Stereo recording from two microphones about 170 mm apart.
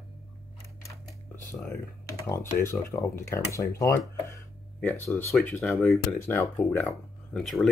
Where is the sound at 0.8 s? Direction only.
15° left (ahead or behind).